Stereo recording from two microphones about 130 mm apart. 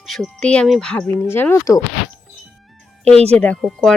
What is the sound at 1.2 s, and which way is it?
Speech, 20° left (ahead or behind).